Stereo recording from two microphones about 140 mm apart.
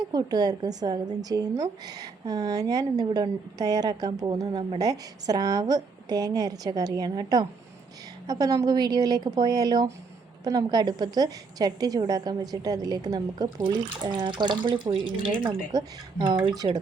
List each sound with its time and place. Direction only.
0.1 s a woman's voice: 30° right (ahead or behind)
15.7 s a woman's voice: 25° right (ahead or behind)